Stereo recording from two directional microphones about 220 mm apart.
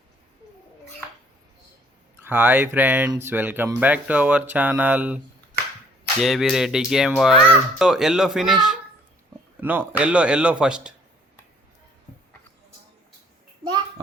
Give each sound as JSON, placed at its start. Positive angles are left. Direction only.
{"t": 2.1, "sound": "speech", "side_deg": -10}
{"t": 6.2, "sound": "speech", "side_deg": 0}